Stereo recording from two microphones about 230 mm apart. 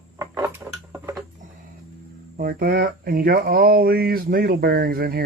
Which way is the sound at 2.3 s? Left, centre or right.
Right.